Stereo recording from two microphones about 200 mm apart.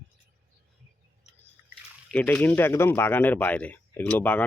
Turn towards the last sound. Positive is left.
turn(degrees=10)  # may be behind; listen again after turning